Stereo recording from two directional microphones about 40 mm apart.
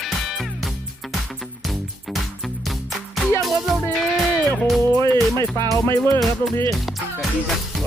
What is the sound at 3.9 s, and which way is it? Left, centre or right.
Speech, centre.